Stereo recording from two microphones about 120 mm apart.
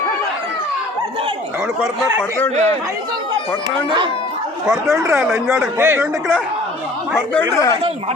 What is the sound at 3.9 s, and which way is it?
Speech, 40° right (ahead or behind).